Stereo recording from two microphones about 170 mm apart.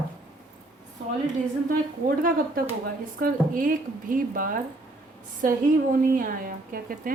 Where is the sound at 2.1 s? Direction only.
60° right (ahead or behind).